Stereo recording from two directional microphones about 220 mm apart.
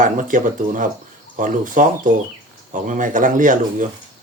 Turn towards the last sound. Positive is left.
turn(degrees=-35)  # may be behind; listen again after turning